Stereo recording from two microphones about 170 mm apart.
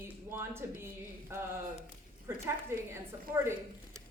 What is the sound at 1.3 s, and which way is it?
Speech, 15° right (ahead or behind).